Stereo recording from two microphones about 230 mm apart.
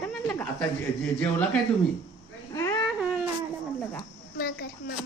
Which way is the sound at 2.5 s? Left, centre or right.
Centre.